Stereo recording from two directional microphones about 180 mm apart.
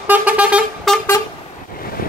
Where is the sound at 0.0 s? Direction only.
10° right (ahead or behind).